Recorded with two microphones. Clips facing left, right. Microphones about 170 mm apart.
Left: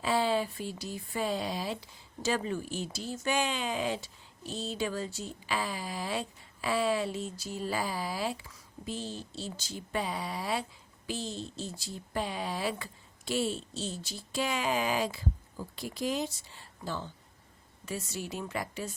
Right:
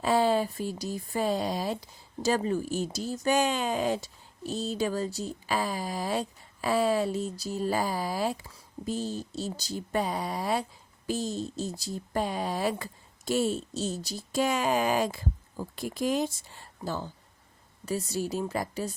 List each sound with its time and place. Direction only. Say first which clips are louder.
0.0 s a woman's voice: right 4 dB; 45° right (ahead or behind)